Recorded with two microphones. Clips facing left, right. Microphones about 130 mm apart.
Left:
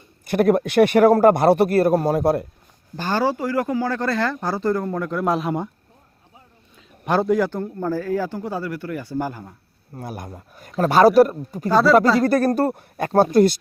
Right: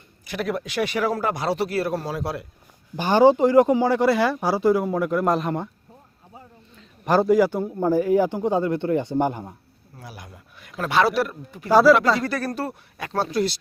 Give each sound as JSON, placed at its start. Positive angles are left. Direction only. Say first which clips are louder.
{"t": 0.3, "sound": "a man's voice", "louder": "left 10 dB", "side_deg": 50}
{"t": 2.9, "sound": "a man's voice", "louder": "right 6 dB", "side_deg": -15}
{"t": 6.7, "sound": "a man's voice", "louder": "right 1 dB", "side_deg": 0}
{"t": 9.9, "sound": "a man's voice", "louder": "left 9 dB", "side_deg": 50}
{"t": 11.7, "sound": "speech", "louder": "right 2 dB", "side_deg": -5}
{"t": 12.2, "sound": "a man's voice", "louder": "left 9 dB", "side_deg": 45}